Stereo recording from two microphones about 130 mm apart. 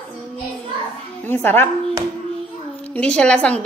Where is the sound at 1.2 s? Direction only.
15° left (ahead or behind).